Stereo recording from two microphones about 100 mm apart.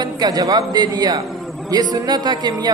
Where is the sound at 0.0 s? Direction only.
40° right (ahead or behind).